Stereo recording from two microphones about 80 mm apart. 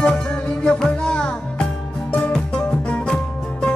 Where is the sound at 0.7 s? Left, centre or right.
Centre.